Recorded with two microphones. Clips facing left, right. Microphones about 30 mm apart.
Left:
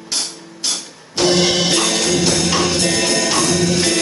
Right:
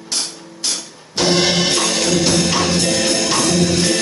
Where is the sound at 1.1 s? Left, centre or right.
Centre.